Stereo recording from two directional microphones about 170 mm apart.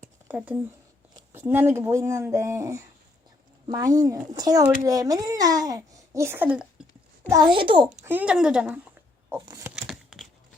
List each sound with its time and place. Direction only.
0.0 s a sound: 10° right (ahead or behind)
1.1 s speech: 15° right (ahead or behind)
7.3 s speech: 25° right (ahead or behind)
8.0 s speech: 10° right (ahead or behind)
9.7 s tearing: centre (ahead or behind)